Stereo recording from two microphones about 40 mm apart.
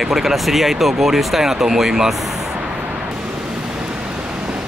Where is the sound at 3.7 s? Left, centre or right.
Right.